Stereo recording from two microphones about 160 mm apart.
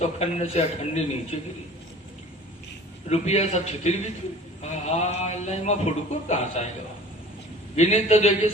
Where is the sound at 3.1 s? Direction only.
45° left (ahead or behind).